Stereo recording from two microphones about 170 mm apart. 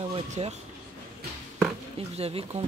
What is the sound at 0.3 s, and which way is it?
Speech, 40° right (ahead or behind).